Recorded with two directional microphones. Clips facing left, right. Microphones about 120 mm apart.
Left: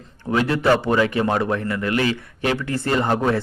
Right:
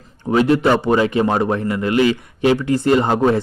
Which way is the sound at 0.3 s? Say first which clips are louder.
Right 4 dB; 25° right (ahead or behind).